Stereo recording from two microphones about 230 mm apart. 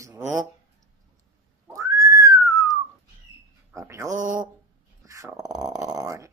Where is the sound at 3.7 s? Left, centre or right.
Centre.